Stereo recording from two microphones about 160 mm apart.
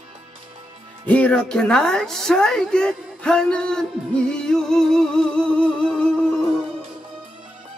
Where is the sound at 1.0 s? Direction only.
10° left (ahead or behind).